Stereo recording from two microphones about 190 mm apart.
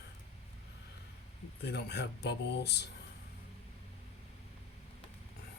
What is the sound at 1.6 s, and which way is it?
Speech, 60° left (ahead or behind).